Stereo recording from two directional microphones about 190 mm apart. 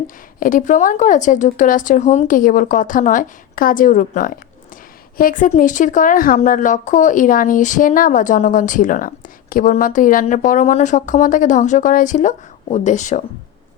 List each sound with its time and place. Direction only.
0.3 s a woman's voice: 45° left (ahead or behind)